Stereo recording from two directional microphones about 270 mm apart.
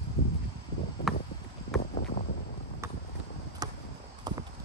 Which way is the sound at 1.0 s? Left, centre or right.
Centre.